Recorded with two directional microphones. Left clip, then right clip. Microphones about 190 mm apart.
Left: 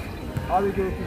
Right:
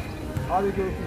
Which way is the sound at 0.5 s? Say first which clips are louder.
Left 2 dB; 50° left (ahead or behind).